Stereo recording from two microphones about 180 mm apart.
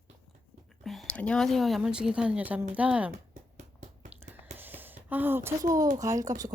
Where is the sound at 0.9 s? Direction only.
5° left (ahead or behind).